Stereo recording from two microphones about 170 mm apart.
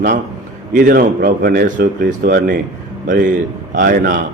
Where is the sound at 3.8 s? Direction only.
55° right (ahead or behind).